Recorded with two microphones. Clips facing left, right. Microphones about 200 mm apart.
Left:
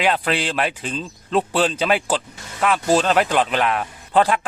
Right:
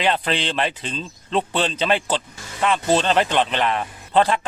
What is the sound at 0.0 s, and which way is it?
Speech, 5° left (ahead or behind).